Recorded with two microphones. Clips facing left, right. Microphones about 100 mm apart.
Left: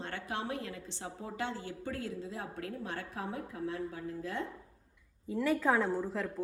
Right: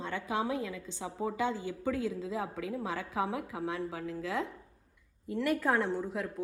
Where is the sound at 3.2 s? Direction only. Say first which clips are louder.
Right 3 dB; 90° right.